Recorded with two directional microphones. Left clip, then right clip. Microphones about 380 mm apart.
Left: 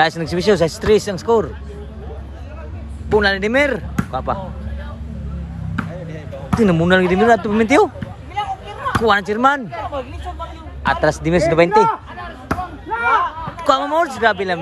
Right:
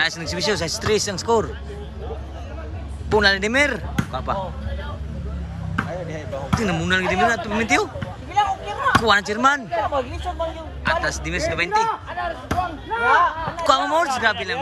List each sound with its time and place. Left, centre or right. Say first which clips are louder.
0.0 s speech: left 6 dB; centre
3.1 s speech: left 2 dB; centre
6.5 s speech: left 7 dB; centre
8.4 s a sound: right 3 dB; right
9.0 s speech: left 3 dB; centre
9.7 s speech: right 3 dB; right
10.8 s speech: left 6 dB; centre
13.0 s a sound: even; right
13.7 s speech: left 2 dB; centre